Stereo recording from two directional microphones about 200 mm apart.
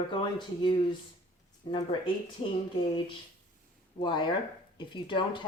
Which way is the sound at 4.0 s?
25° left (ahead or behind).